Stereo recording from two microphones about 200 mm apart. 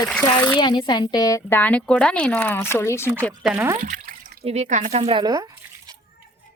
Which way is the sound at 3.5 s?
15° right (ahead or behind).